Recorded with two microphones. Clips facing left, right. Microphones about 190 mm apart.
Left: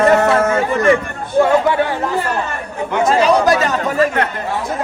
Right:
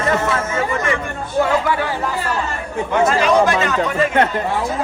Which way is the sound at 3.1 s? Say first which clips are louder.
Left 5 dB; 35° left (ahead or behind).